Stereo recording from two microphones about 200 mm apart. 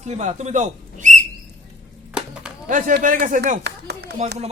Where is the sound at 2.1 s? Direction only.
5° right (ahead or behind).